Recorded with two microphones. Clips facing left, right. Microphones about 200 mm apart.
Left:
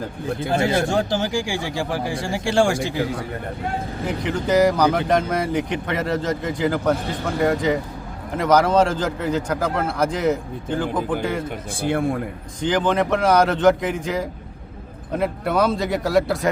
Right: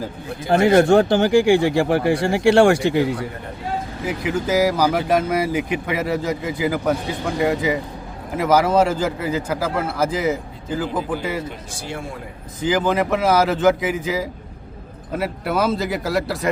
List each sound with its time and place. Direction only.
0.5 s speech: 60° right (ahead or behind)
4.0 s a man's voice: 5° right (ahead or behind)
11.4 s speech: 55° left (ahead or behind)
12.6 s a man's voice: 5° right (ahead or behind)